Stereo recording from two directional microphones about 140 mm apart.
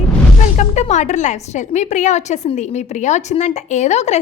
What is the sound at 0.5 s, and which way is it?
Speech, 55° left (ahead or behind).